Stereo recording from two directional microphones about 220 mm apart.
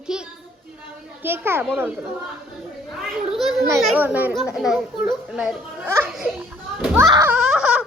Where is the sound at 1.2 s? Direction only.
10° right (ahead or behind).